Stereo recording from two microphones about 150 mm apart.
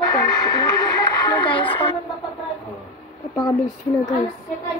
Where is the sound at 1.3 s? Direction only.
30° left (ahead or behind).